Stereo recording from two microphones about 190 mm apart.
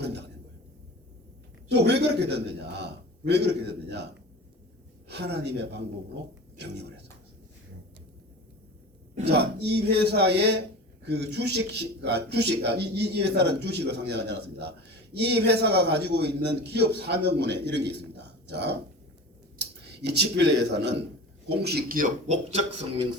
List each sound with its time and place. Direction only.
0.0 s a sound: 60° right (ahead or behind)
1.7 s a man's voice: 60° right (ahead or behind)
9.2 s a man's voice: 60° right (ahead or behind); by 22.6 s 40° right (ahead or behind)